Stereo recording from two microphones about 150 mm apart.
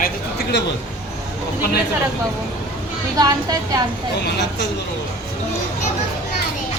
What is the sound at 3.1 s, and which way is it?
Speech, 25° right (ahead or behind).